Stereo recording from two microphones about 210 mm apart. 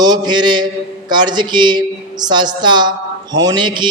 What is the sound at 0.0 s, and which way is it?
A man's voice, 20° right (ahead or behind).